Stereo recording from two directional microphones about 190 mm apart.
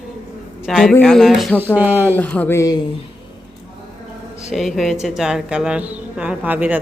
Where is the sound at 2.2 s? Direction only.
10° left (ahead or behind).